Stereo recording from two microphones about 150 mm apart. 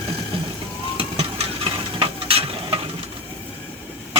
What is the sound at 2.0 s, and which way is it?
Stir, 35° right (ahead or behind).